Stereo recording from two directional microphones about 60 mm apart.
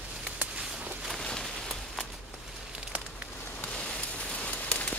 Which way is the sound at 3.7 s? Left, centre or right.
Centre.